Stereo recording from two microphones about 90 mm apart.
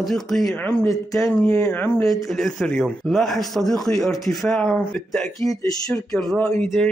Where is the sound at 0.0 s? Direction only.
5° left (ahead or behind).